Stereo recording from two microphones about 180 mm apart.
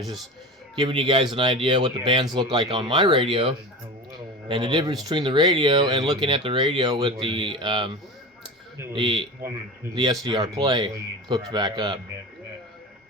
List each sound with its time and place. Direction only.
0.0 s a man's voice: centre (ahead or behind)
0.8 s speech: 25° right (ahead or behind)
4.1 s a sound: 25° right (ahead or behind)
5.0 s speech: 25° right (ahead or behind)